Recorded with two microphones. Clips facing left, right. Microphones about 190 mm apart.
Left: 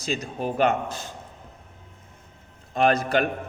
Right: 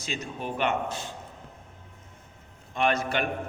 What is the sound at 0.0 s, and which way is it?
A man's voice, 35° left (ahead or behind).